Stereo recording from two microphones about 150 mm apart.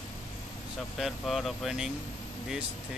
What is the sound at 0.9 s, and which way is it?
Speech, centre (ahead or behind).